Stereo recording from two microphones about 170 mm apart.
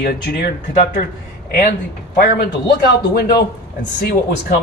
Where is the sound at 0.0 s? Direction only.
75° left (ahead or behind).